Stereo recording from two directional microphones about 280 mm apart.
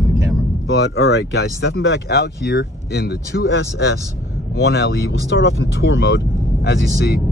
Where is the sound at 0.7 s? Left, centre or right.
Left.